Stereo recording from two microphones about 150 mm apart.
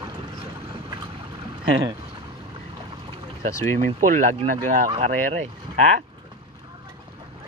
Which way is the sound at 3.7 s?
55° right (ahead or behind).